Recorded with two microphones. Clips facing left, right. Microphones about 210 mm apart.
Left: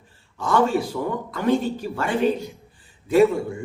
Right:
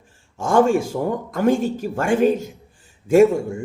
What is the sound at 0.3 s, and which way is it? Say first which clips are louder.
A man's voice: right 4 dB; 45° right (ahead or behind).